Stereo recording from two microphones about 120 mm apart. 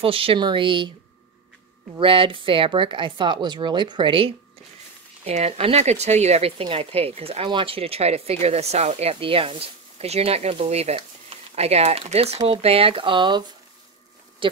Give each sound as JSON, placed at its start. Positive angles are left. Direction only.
{"t": 0.0, "sound": "speech", "side_deg": -50}
{"t": 2.0, "sound": "speech", "side_deg": -45}
{"t": 5.2, "sound": "speech", "side_deg": -60}